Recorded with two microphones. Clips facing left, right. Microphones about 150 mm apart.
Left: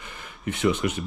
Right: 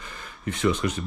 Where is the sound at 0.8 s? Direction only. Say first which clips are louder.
Left 1 dB; 35° right (ahead or behind).